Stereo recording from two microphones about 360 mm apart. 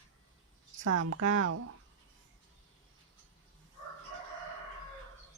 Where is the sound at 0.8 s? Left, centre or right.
Right.